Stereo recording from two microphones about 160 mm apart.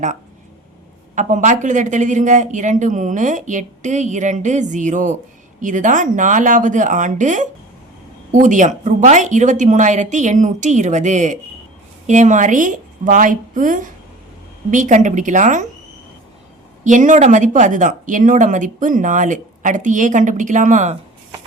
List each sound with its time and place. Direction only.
1.1 s speech: 50° right (ahead or behind)
16.8 s speech: 50° right (ahead or behind)